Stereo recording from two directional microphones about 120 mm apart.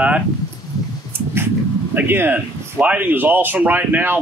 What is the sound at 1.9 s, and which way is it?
A man's voice, 15° right (ahead or behind).